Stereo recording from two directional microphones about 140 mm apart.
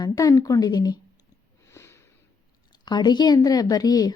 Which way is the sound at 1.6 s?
20° left (ahead or behind).